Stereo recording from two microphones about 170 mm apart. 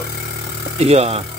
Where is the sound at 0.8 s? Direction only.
40° right (ahead or behind).